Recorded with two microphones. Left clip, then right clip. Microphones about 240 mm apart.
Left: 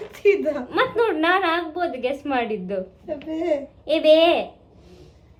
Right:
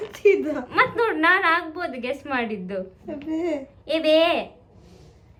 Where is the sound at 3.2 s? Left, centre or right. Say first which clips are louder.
Left 3 dB; centre.